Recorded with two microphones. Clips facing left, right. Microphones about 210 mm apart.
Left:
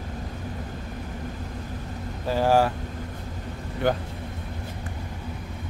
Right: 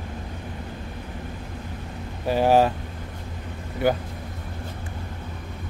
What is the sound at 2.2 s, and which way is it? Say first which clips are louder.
Vehicle: right 2 dB; 20° right (ahead or behind).